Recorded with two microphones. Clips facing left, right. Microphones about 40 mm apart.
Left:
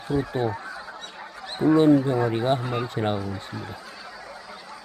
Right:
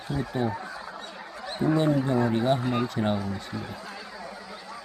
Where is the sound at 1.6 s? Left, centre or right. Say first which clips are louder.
Left 6 dB; centre.